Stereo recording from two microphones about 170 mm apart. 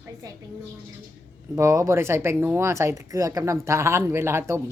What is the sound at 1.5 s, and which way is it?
Speech, 20° right (ahead or behind).